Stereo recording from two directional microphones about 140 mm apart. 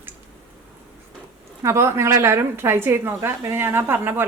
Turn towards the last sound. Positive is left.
turn(degrees=-15)  # may be behind; listen again after turning